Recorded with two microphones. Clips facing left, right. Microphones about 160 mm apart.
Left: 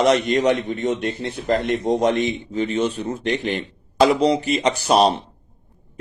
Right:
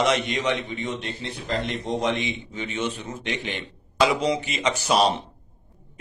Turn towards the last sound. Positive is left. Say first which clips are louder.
# left 4 dB
turn(degrees=35)  # may be behind; listen again after turning